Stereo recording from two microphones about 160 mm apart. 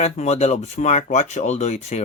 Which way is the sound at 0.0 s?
45° left (ahead or behind).